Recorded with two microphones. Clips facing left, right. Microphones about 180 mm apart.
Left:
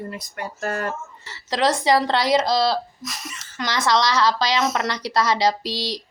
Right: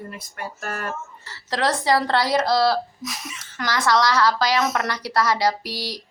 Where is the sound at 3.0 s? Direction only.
Centre (ahead or behind).